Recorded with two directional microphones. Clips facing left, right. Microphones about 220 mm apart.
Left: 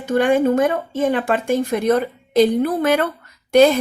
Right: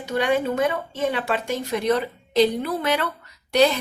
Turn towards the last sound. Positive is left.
turn(degrees=50)  # may be behind; listen again after turning